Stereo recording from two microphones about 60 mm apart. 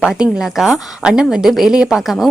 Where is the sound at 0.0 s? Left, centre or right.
Centre.